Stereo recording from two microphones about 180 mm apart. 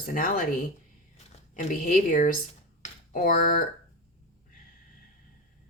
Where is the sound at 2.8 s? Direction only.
50° left (ahead or behind).